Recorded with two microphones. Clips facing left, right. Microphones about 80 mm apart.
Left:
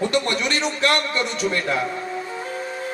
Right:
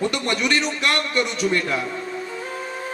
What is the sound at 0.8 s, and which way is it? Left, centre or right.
Speech, left.